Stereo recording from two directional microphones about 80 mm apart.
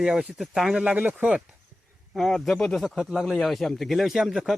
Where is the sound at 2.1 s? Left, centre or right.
Centre.